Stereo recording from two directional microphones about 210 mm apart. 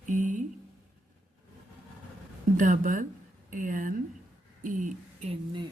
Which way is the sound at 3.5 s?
40° right (ahead or behind).